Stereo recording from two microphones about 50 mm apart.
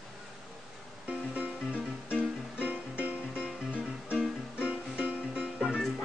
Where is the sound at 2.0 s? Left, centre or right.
Right.